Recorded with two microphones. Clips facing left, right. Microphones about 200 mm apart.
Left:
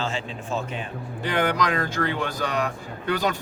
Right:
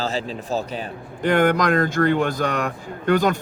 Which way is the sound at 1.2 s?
50° right (ahead or behind).